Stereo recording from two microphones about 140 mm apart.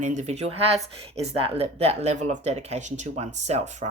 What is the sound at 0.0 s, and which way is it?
Speech, 60° right (ahead or behind).